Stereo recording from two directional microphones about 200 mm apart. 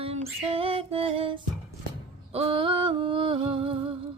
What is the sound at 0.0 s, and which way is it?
Music, 30° right (ahead or behind).